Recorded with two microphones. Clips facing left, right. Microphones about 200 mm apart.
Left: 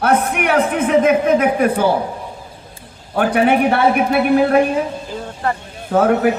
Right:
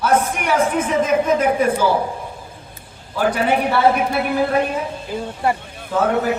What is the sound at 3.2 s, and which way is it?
A man's voice, 60° left (ahead or behind).